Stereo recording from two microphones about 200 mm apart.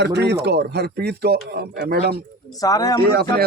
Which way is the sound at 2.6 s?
20° left (ahead or behind).